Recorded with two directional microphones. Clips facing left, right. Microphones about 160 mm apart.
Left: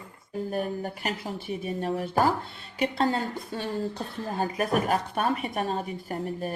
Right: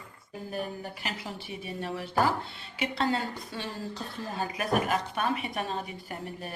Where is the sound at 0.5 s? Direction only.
45° left (ahead or behind).